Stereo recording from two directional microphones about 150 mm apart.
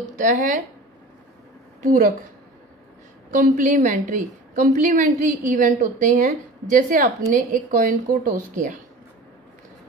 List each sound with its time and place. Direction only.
0.0 s a woman's voice: 60° right (ahead or behind)
1.8 s a woman's voice: 60° right (ahead or behind)
3.3 s a woman's voice: 60° right (ahead or behind)